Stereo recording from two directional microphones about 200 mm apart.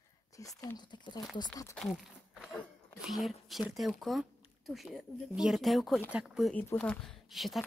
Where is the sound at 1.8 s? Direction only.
Centre (ahead or behind).